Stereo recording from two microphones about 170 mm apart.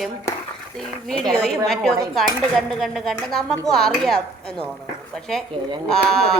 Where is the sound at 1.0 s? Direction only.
5° left (ahead or behind).